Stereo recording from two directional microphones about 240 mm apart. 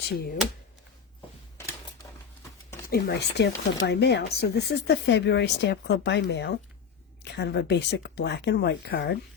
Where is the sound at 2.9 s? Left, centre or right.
Left.